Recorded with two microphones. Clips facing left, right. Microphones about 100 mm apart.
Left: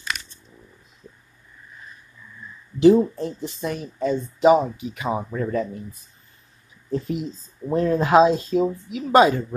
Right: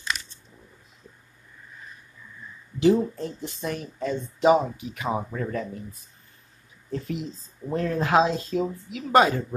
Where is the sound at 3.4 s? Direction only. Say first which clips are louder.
Left 3 dB; 10° left (ahead or behind).